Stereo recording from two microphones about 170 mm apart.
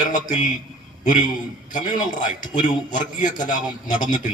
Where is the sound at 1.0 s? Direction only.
50° left (ahead or behind).